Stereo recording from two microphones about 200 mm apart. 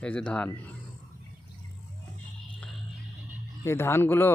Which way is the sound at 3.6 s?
10° left (ahead or behind).